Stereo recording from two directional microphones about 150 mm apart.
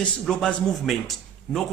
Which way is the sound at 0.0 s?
5° left (ahead or behind).